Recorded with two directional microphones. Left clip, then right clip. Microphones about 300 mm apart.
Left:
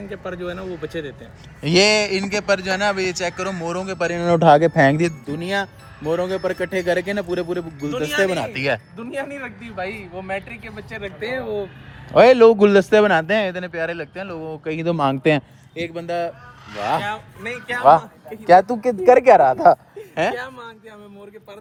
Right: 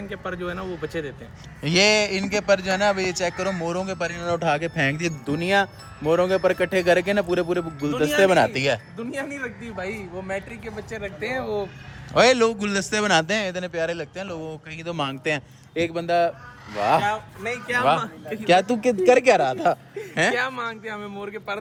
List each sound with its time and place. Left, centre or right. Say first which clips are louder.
0.1 s speech: left 1 dB; centre
4.2 s speech: left 10 dB; left
4.4 s a man's voice: left 11 dB; left
5.3 s speech: right 3 dB; centre
9.0 s a man's voice: left 2 dB; left
11.2 s speech: left 2 dB; centre
12.1 s speech: left 7 dB; centre
14.6 s a man's voice: left 10 dB; centre
15.9 s speech: right 3 dB; centre
17.0 s speech: right 2 dB; right
18.0 s a man's voice: right 1 dB; centre